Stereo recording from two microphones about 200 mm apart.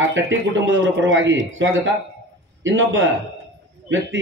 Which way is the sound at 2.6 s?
70° right (ahead or behind).